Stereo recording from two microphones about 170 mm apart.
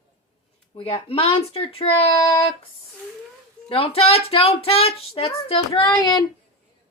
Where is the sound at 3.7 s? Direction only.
35° left (ahead or behind).